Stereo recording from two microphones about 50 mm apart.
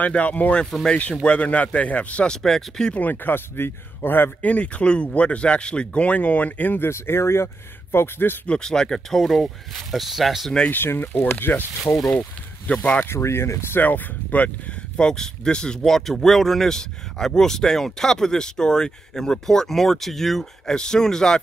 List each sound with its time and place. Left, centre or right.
0.0 s speech: left
2.2 s speech: centre
2.9 s speech: left
4.4 s speech: left
6.8 s speech: left
7.9 s speech: left
8.5 s speech: centre
10.7 s speech: left
11.9 s speech: left
12.2 s speech: left
13.0 s speech: left
13.7 s speech: left
15.0 s speech: centre